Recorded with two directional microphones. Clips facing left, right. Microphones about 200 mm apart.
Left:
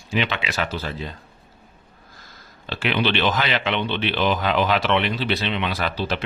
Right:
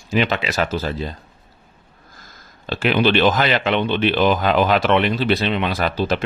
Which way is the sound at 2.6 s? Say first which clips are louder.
Right 5 dB; 45° right (ahead or behind).